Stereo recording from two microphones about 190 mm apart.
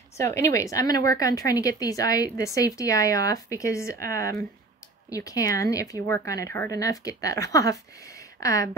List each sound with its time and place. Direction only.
0.2 s a woman's voice: 15° left (ahead or behind)
5.1 s a woman's voice: 20° left (ahead or behind)